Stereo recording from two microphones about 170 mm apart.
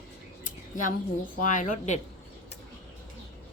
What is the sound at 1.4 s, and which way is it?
Speech, 50° left (ahead or behind).